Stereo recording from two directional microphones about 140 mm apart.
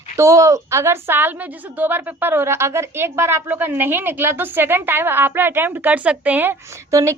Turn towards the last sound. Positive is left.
turn(degrees=-20)  # may be behind; listen again after turning